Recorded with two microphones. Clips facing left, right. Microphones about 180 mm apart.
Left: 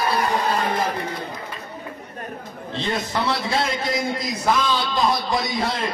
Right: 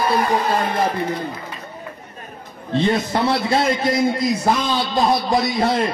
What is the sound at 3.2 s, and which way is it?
A man's voice, 55° right (ahead or behind).